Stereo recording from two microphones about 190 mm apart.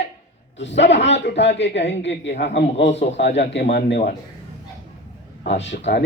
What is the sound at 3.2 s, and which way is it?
Speech, 65° left (ahead or behind).